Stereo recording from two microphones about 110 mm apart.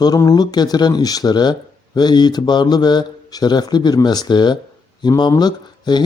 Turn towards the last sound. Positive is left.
turn(degrees=40)  # may be behind; listen again after turning